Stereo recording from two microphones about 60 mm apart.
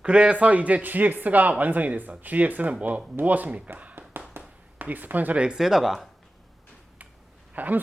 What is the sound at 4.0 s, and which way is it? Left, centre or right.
Tap, right.